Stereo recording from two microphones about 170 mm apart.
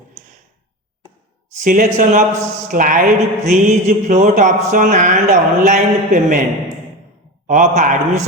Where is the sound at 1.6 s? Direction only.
50° right (ahead or behind).